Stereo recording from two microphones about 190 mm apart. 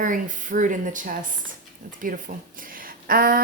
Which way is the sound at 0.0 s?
45° right (ahead or behind).